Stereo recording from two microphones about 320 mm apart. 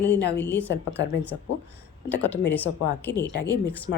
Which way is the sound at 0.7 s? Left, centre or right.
Left.